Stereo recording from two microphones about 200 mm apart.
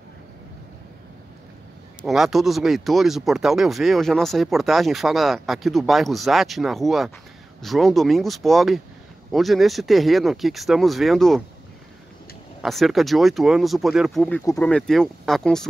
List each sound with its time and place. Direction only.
2.0 s speech: centre (ahead or behind)
12.6 s speech: centre (ahead or behind)
14.4 s speech: 15° left (ahead or behind)
14.7 s speech: 5° left (ahead or behind)